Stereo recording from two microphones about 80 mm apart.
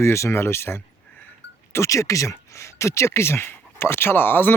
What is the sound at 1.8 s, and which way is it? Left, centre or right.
Speech, left.